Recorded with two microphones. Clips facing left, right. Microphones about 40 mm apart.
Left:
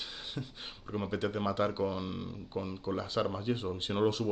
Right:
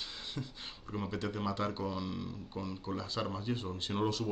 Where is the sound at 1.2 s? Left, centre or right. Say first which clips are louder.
Left 5 dB; left.